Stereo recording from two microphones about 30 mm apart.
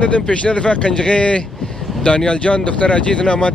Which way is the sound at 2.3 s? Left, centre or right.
Left.